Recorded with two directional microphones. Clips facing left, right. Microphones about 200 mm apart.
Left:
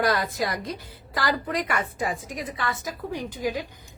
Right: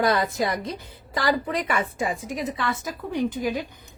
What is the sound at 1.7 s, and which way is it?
A woman's voice, 25° right (ahead or behind).